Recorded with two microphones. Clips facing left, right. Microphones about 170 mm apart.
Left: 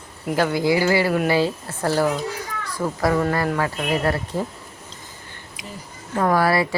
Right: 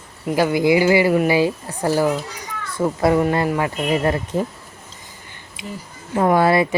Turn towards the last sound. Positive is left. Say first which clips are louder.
# right 3 dB
turn(degrees=-20)  # may be behind; listen again after turning